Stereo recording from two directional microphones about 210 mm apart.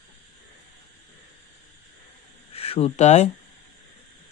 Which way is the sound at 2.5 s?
25° left (ahead or behind).